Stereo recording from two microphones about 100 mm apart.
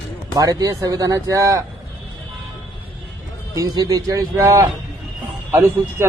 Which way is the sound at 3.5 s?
40° right (ahead or behind).